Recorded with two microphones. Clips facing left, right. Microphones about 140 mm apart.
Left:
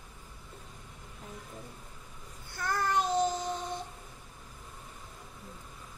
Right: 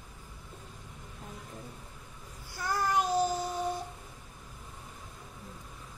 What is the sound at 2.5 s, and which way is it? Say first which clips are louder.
Child singing: even; 10° right (ahead or behind).